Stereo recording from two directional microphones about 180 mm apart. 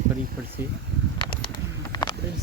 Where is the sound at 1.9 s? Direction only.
25° left (ahead or behind).